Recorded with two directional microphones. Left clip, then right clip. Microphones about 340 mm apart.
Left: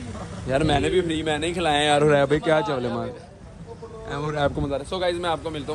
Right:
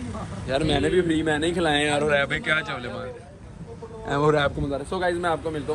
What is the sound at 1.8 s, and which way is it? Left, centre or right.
Speech, left.